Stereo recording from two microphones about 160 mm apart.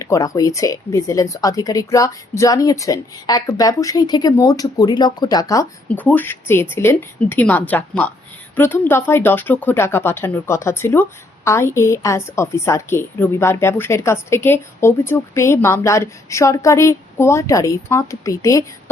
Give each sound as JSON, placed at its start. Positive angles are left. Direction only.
{"t": 0.0, "sound": "speech", "side_deg": 20}
{"t": 5.9, "sound": "a woman's voice", "side_deg": 10}